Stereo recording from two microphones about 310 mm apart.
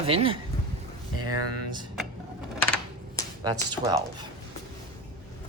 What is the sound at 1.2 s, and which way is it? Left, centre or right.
Speech, right.